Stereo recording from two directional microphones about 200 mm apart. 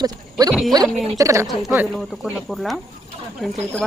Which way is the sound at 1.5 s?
Centre (ahead or behind).